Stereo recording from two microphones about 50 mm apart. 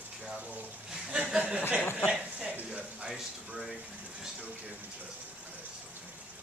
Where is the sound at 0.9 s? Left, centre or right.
Centre.